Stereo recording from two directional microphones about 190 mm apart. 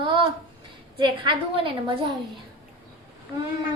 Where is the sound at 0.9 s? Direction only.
25° right (ahead or behind).